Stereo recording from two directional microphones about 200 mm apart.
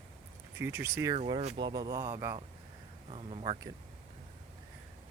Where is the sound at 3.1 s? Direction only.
30° right (ahead or behind).